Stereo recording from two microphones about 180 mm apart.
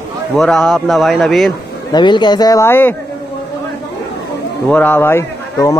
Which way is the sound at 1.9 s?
25° left (ahead or behind).